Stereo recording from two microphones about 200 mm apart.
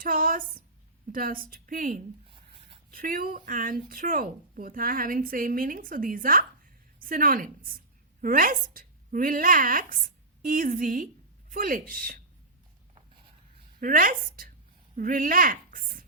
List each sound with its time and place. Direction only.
0.0 s speech: 45° right (ahead or behind)
2.3 s a sound: 25° right (ahead or behind)
2.9 s speech: 45° right (ahead or behind)
13.7 s a woman's voice: 45° right (ahead or behind)